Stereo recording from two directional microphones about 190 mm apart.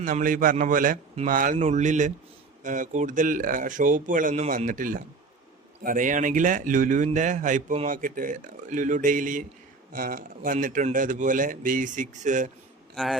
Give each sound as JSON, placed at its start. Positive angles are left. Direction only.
{"t": 0.0, "sound": "a man's voice", "side_deg": -45}
{"t": 12.9, "sound": "speech", "side_deg": 0}